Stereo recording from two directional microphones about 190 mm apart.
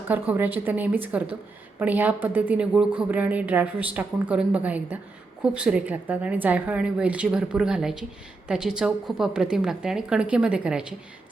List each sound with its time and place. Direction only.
0.1 s a woman's voice: 10° right (ahead or behind)